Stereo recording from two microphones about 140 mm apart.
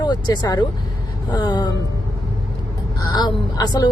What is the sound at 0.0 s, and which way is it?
Speech, 30° left (ahead or behind).